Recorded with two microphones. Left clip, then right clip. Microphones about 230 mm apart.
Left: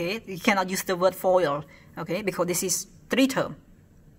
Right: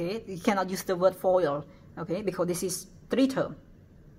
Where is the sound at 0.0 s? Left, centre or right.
Centre.